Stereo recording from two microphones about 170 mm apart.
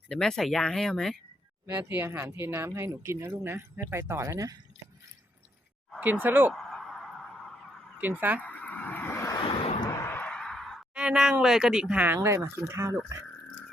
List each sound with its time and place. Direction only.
0.1 s speech: 5° left (ahead or behind)
1.6 s speech: 10° right (ahead or behind)
6.0 s speech: 10° right (ahead or behind)
6.5 s a sound: centre (ahead or behind)
8.4 s vehicle: 10° left (ahead or behind)
9.4 s vehicle: 30° left (ahead or behind)
9.9 s speech: 15° left (ahead or behind); by 13.0 s 15° right (ahead or behind)